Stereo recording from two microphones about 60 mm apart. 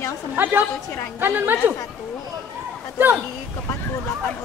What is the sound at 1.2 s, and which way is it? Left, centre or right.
Chatter, right.